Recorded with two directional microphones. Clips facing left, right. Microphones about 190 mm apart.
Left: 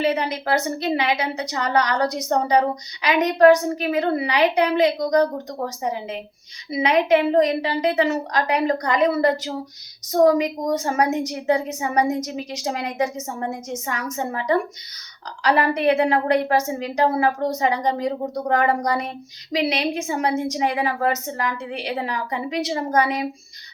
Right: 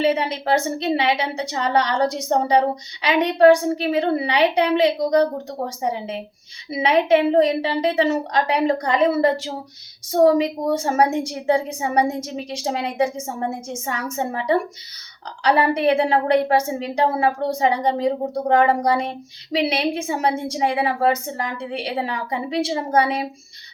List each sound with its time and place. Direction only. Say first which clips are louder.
0.0 s a woman's voice: right 2 dB; 25° right (ahead or behind)